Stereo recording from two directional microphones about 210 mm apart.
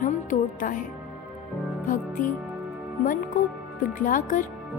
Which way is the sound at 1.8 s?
40° left (ahead or behind).